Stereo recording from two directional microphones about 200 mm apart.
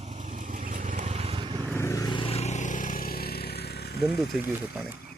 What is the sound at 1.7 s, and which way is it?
Vehicle, 15° left (ahead or behind).